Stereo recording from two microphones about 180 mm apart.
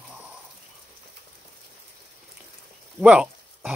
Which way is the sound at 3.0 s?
5° right (ahead or behind).